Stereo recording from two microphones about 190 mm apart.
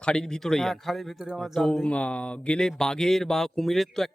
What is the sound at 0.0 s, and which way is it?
A man's voice, 5° left (ahead or behind).